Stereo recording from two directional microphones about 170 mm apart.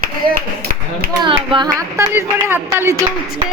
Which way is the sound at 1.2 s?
30° right (ahead or behind).